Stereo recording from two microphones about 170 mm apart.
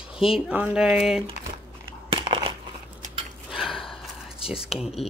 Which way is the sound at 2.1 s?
30° right (ahead or behind).